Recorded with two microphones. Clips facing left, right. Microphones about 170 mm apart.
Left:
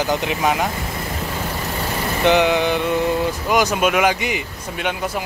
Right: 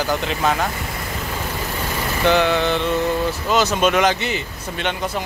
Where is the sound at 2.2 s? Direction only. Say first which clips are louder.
Left 1 dB; 15° left (ahead or behind).